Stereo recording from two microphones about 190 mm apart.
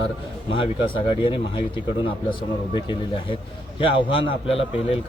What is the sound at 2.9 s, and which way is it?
Speech, 25° left (ahead or behind).